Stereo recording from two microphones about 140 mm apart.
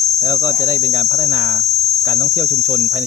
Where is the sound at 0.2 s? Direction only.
15° right (ahead or behind).